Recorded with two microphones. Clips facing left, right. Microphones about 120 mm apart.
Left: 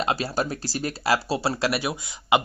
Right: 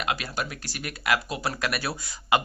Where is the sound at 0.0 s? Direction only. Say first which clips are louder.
Left 5 dB; 30° left (ahead or behind).